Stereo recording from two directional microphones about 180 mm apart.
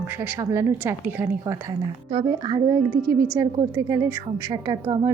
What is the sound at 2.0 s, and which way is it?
A woman's voice, 25° right (ahead or behind).